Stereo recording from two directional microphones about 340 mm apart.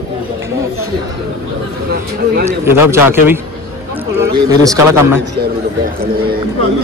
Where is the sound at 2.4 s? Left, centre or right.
Centre.